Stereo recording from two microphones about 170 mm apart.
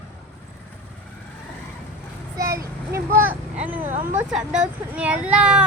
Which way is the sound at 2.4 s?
20° right (ahead or behind).